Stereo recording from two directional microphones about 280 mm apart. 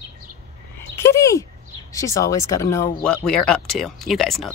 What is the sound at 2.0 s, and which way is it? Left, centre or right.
Speech, centre.